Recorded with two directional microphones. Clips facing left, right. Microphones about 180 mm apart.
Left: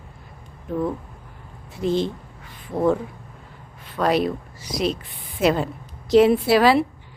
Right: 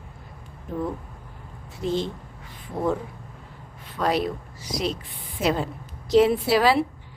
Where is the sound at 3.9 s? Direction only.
65° left (ahead or behind).